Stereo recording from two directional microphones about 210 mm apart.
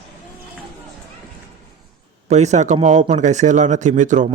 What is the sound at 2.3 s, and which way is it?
Speech, 35° right (ahead or behind).